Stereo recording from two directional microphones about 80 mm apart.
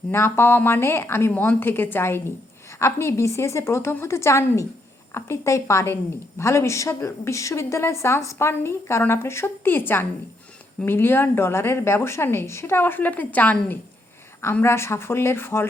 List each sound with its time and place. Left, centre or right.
0.1 s a woman's voice: left
14.6 s a woman's voice: left